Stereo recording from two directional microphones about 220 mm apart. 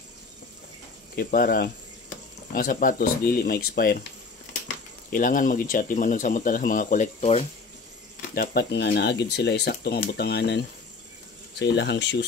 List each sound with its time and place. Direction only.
1.1 s speech: 40° left (ahead or behind)
5.1 s speech: 40° left (ahead or behind)
8.4 s speech: 45° left (ahead or behind)
11.6 s speech: 50° left (ahead or behind)